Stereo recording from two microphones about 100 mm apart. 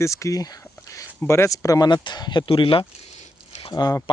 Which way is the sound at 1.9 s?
50° left (ahead or behind).